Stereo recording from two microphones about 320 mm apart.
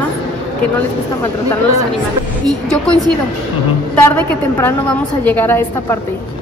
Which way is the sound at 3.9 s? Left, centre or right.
Centre.